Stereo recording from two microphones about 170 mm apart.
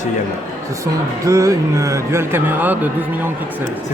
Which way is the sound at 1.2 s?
20° right (ahead or behind).